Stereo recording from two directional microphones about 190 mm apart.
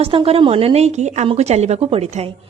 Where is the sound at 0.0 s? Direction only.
30° right (ahead or behind).